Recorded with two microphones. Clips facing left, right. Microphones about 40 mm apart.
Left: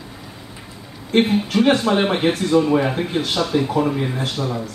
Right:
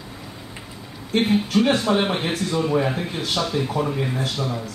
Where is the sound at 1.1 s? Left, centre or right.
Left.